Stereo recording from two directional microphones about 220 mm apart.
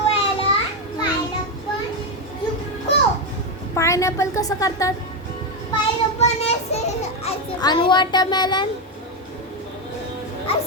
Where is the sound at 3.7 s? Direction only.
15° left (ahead or behind).